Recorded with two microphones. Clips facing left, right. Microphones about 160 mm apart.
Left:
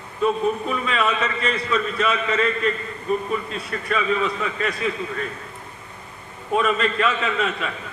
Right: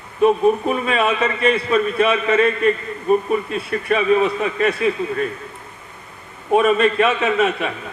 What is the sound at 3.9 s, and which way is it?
Speech, 50° right (ahead or behind).